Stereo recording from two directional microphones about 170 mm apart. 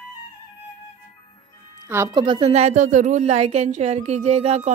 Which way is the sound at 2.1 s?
30° right (ahead or behind).